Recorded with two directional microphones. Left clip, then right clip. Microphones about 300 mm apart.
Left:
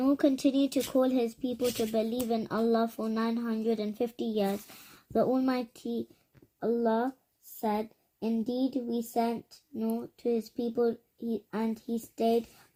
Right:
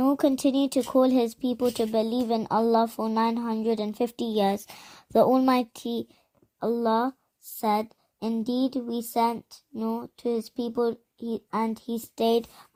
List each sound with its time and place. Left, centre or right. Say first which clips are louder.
0.0 s speech: right 3 dB; right